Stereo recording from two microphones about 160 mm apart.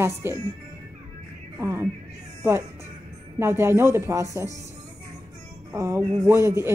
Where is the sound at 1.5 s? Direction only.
15° right (ahead or behind).